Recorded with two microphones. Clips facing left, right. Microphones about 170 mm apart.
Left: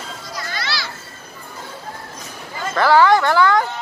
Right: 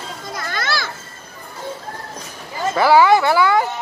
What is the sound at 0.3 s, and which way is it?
Children playing, 50° right (ahead or behind).